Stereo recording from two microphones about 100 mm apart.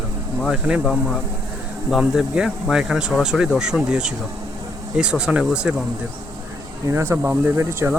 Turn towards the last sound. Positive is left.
turn(degrees=-25)  # may be behind; listen again after turning